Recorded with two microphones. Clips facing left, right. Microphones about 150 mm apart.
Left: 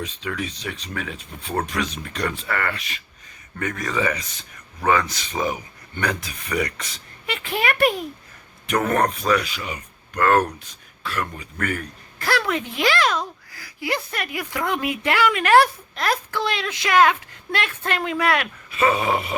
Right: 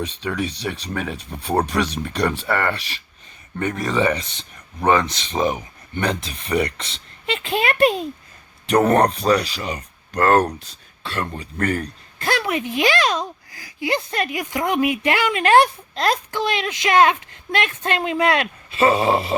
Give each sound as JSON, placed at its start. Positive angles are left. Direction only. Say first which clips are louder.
{"t": 0.0, "sound": "speech", "louder": "right 4 dB", "side_deg": -35}
{"t": 8.6, "sound": "speech", "louder": "right 5 dB", "side_deg": -35}
{"t": 12.2, "sound": "speech", "louder": "right 1 dB", "side_deg": -20}